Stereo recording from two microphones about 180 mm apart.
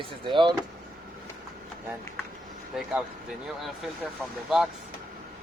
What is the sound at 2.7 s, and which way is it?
Speech, 5° right (ahead or behind).